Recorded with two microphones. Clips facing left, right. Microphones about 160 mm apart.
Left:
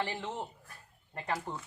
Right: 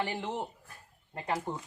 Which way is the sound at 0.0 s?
15° right (ahead or behind).